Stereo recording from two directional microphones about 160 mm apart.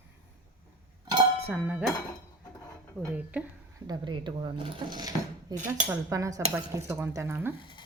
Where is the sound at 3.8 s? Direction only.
25° right (ahead or behind).